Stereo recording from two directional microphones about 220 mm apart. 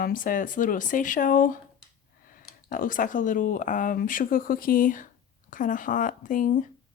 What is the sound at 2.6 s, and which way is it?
Speech, 40° left (ahead or behind).